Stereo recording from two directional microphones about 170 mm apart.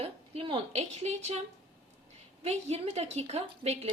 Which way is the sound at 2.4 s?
40° right (ahead or behind).